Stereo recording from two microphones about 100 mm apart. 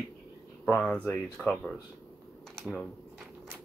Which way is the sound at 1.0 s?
20° left (ahead or behind).